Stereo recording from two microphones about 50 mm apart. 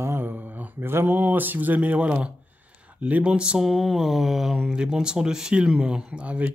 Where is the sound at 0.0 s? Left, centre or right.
Right.